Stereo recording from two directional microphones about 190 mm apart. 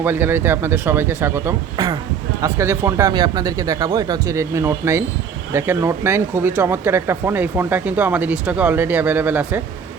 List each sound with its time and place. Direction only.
0.0 s speech: 10° right (ahead or behind)